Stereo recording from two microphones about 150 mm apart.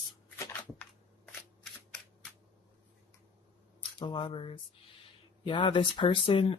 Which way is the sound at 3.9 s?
30° left (ahead or behind).